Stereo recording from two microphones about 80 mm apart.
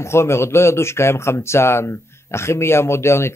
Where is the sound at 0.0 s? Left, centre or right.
Left.